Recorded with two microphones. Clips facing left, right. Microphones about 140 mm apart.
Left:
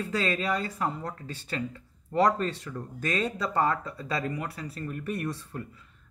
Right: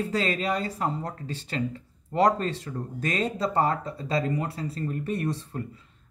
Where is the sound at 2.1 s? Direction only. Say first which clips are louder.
Right 2 dB; 25° right (ahead or behind).